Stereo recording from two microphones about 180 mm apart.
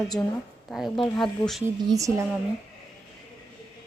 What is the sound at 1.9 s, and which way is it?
Speech, 20° right (ahead or behind).